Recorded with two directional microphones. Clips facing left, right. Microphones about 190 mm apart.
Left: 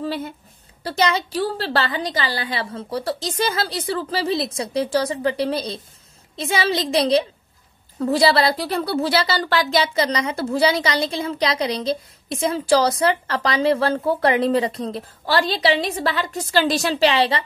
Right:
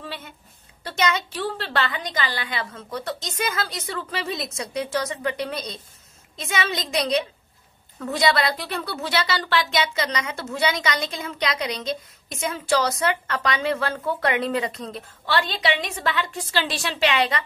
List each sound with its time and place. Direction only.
0.0 s a woman's voice: 40° left (ahead or behind)